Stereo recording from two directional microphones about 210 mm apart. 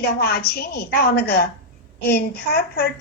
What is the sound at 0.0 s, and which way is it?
Speech, 50° left (ahead or behind).